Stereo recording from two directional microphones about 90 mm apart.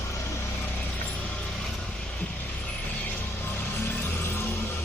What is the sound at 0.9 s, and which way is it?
Vehicle, 15° left (ahead or behind).